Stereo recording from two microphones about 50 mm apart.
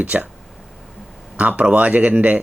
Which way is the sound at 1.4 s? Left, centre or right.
Right.